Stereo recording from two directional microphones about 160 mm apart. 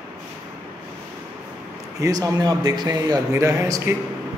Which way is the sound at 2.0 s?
20° right (ahead or behind).